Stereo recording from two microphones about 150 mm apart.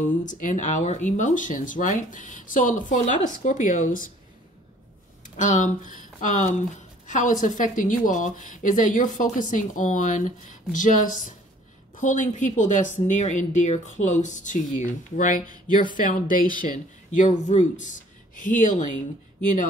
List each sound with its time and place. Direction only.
0.2 s a woman's voice: 60° left (ahead or behind)
5.4 s a woman's voice: 55° left (ahead or behind)